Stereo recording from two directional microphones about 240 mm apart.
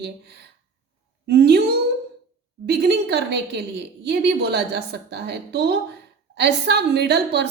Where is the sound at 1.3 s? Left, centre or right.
Right.